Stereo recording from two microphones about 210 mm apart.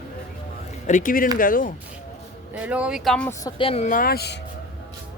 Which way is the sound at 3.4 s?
25° left (ahead or behind).